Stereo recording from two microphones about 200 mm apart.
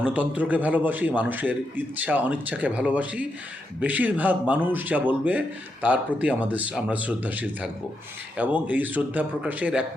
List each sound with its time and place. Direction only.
0.0 s a man's voice: 5° right (ahead or behind)